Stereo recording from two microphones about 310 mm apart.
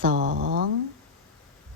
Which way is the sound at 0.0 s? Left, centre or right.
Right.